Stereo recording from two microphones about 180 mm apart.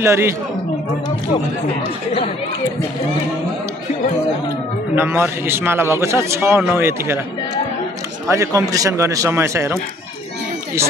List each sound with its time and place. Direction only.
0.0 s a man's voice: 15° right (ahead or behind)
4.9 s a man's voice: 15° right (ahead or behind)
8.3 s a man's voice: 15° right (ahead or behind)